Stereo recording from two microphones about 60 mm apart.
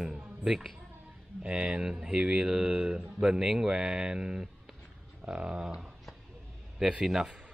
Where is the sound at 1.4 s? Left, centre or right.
Centre.